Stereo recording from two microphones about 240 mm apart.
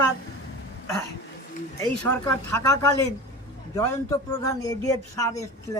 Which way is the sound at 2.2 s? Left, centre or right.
Centre.